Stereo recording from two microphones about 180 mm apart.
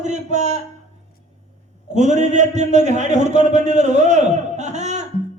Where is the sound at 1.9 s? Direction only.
40° right (ahead or behind).